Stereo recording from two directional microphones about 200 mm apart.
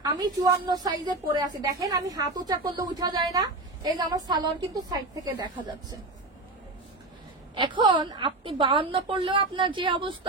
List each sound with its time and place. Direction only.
0.0 s a woman's voice: 20° right (ahead or behind)
7.5 s a woman's voice: 20° right (ahead or behind)